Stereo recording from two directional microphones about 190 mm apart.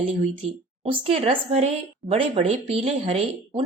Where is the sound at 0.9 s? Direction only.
30° right (ahead or behind).